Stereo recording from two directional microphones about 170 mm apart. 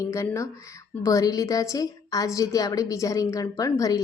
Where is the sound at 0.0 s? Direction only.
15° left (ahead or behind).